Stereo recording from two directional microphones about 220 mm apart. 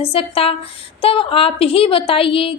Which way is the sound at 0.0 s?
25° left (ahead or behind).